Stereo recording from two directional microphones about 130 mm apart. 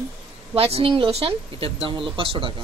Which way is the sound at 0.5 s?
50° right (ahead or behind).